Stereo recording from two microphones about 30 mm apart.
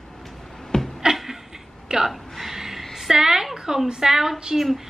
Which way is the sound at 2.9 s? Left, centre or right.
Centre.